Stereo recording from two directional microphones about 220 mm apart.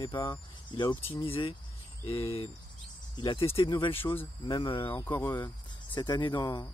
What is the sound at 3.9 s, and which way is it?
Speech, 10° left (ahead or behind).